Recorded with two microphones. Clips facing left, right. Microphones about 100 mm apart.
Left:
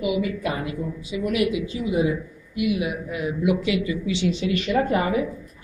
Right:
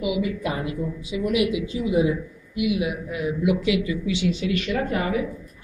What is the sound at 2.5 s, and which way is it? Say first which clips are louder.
A man's voice: even; 5° right (ahead or behind).